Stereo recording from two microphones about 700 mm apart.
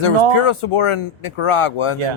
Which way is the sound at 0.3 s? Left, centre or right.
Left.